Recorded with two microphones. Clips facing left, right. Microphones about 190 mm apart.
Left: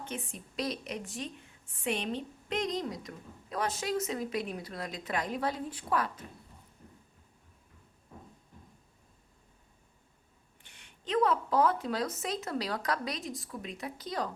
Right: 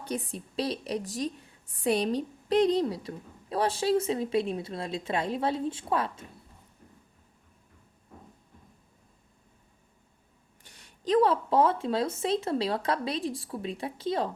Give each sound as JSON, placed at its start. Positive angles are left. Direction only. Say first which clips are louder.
{"t": 0.0, "sound": "a woman's voice", "louder": "right 6 dB", "side_deg": -35}
{"t": 10.6, "sound": "a woman's voice", "louder": "right 8 dB", "side_deg": -40}